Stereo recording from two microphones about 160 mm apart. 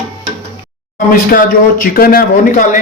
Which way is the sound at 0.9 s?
60° left (ahead or behind).